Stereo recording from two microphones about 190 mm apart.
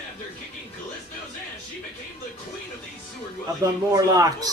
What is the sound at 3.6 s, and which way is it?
Speech, 20° right (ahead or behind).